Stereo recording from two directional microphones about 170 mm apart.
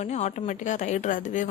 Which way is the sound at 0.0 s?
40° left (ahead or behind).